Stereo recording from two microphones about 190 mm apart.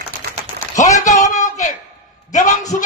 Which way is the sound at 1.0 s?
40° left (ahead or behind).